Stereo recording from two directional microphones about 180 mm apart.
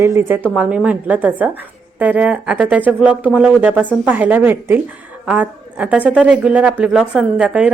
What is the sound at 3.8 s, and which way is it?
Speech, 5° left (ahead or behind).